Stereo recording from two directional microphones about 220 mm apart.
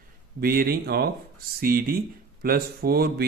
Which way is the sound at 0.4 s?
45° right (ahead or behind).